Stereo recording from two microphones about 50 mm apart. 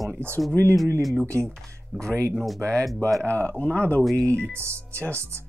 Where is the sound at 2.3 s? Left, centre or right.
Centre.